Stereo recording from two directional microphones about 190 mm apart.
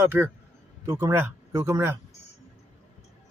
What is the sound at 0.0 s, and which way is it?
Speech, 10° right (ahead or behind).